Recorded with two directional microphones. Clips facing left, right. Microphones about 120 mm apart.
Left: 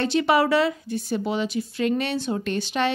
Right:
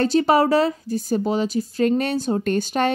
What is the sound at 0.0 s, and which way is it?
Speech, 40° right (ahead or behind).